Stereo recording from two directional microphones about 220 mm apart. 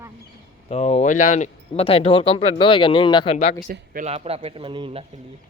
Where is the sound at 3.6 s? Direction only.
40° right (ahead or behind).